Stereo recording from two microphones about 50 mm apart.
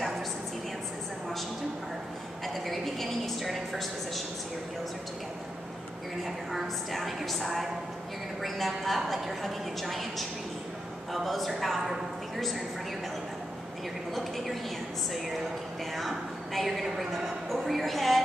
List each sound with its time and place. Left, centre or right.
2.4 s a woman's voice: centre
6.2 s a woman's voice: centre
14.1 s a woman's voice: centre
16.0 s a woman's voice: centre